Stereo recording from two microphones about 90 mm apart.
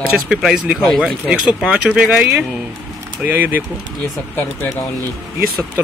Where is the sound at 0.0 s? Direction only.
5° right (ahead or behind).